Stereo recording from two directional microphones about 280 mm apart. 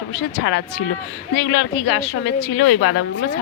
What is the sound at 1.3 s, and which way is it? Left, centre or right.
A woman's voice, left.